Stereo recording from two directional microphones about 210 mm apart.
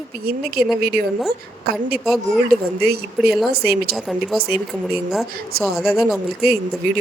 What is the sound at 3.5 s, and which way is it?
Speech, 50° right (ahead or behind).